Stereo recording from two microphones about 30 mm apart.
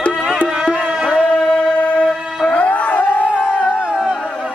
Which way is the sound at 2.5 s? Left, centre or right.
Left.